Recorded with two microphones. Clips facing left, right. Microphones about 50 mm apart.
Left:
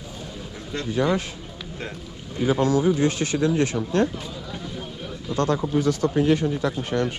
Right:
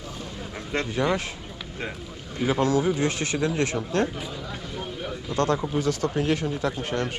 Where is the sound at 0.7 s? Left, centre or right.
Right.